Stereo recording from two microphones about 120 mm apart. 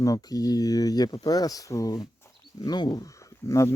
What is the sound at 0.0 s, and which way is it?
Speech, 30° left (ahead or behind).